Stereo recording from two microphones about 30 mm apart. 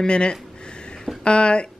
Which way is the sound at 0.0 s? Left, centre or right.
Left.